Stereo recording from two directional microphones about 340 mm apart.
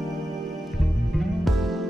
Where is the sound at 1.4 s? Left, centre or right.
Centre.